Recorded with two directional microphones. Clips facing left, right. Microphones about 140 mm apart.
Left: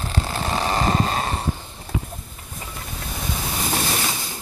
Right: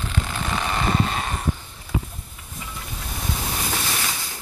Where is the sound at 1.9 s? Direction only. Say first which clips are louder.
Right 1 dB; 50° left (ahead or behind).